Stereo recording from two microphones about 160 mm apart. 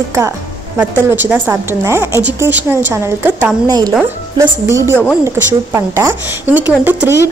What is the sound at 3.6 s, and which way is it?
A woman's voice, 25° right (ahead or behind).